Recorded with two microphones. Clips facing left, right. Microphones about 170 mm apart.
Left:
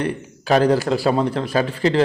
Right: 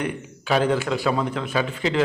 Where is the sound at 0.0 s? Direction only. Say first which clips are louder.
Left 4 dB; 40° left (ahead or behind).